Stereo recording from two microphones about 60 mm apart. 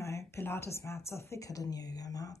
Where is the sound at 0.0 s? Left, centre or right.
Left.